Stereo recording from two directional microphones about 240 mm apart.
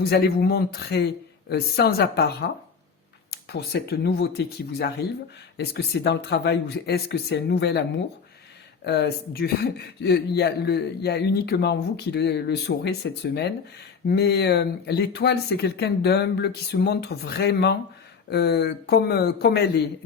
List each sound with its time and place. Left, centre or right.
0.0 s speech: left
3.5 s speech: left